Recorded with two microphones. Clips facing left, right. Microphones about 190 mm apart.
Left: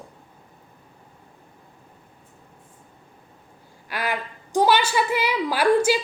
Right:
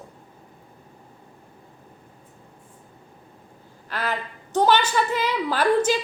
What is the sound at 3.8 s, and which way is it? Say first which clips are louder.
A woman's voice: left 1 dB; 10° left (ahead or behind).